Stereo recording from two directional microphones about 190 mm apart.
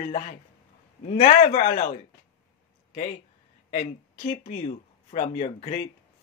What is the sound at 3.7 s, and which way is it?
Speech, 45° left (ahead or behind).